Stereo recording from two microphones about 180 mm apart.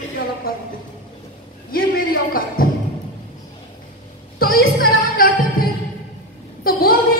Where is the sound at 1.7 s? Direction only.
55° left (ahead or behind).